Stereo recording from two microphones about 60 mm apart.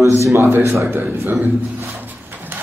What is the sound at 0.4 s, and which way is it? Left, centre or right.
Speech, right.